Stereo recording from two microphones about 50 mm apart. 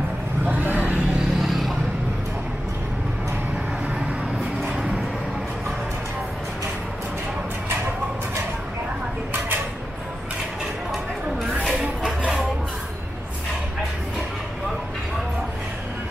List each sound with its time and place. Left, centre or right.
0.5 s vehicle: right
1.4 s vehicle: centre
4.6 s a sound: centre